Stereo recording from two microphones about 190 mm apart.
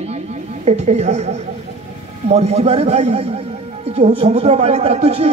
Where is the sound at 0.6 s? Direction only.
35° right (ahead or behind).